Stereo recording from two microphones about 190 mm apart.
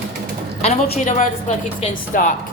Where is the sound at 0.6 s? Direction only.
35° left (ahead or behind).